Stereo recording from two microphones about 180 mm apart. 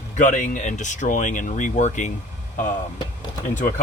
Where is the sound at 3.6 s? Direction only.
45° left (ahead or behind).